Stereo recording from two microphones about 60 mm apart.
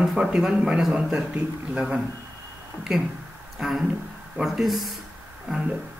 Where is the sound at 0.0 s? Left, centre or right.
Centre.